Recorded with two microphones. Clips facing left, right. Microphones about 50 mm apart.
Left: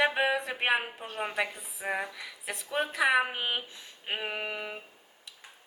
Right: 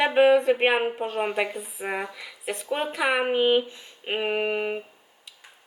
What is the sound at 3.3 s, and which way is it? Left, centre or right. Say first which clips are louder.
Speech: right 13 dB; right.